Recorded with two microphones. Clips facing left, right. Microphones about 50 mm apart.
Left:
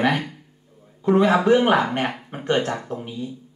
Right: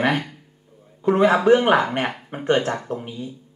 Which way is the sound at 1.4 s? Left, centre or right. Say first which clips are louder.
Right 1 dB; centre.